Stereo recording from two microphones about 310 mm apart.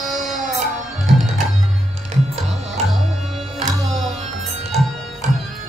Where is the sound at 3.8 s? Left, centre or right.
Centre.